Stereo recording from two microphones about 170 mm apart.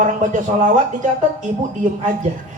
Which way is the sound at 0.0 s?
50° right (ahead or behind).